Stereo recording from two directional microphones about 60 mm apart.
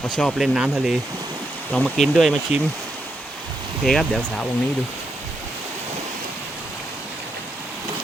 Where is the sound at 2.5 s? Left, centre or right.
Centre.